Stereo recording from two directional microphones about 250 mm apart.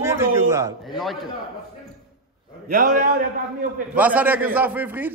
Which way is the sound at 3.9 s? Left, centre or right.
Centre.